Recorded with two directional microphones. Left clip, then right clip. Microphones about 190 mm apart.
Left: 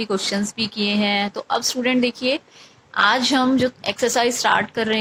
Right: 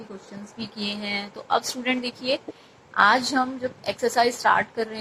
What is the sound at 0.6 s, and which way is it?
A woman's voice, 20° left (ahead or behind).